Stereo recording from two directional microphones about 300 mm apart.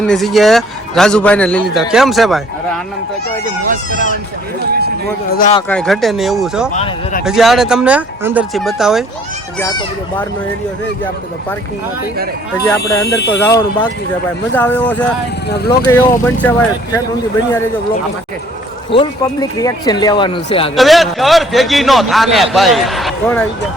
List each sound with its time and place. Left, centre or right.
0.0 s a man's voice: centre
3.8 s speech: left
5.3 s speech: left
5.5 s a man's voice: centre
6.7 s speech: left
7.3 s a man's voice: centre
9.6 s speech: centre
12.8 s speech: left
13.4 s a man's voice: centre
15.4 s speech: left
15.9 s speech: centre
18.9 s speech: centre
20.7 s a man's voice: centre